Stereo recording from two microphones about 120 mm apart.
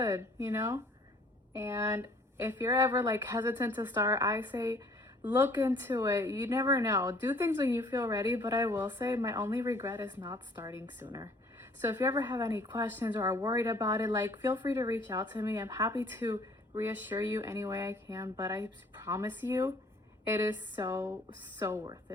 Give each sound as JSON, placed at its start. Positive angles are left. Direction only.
{"t": 0.0, "sound": "a woman's voice", "side_deg": -25}
{"t": 2.6, "sound": "speech", "side_deg": -35}
{"t": 2.9, "sound": "speech", "side_deg": -20}
{"t": 4.5, "sound": "speech", "side_deg": -30}
{"t": 5.2, "sound": "a woman's voice", "side_deg": -15}
{"t": 10.2, "sound": "speech", "side_deg": -40}
{"t": 10.5, "sound": "speech", "side_deg": -20}
{"t": 11.0, "sound": "speech", "side_deg": -30}
{"t": 11.8, "sound": "speech", "side_deg": -15}
{"t": 13.1, "sound": "speech", "side_deg": -35}
{"t": 14.7, "sound": "speech", "side_deg": -25}
{"t": 15.4, "sound": "speech", "side_deg": -25}